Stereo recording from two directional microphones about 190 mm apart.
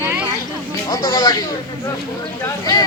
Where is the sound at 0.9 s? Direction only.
15° left (ahead or behind).